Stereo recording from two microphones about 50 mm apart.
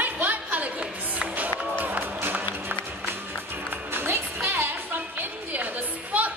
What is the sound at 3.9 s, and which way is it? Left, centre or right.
Music, right.